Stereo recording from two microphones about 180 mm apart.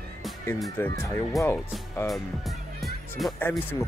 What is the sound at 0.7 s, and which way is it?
Speech, 15° left (ahead or behind).